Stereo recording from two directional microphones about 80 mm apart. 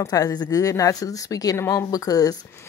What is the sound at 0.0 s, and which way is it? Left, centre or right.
A woman's voice, left.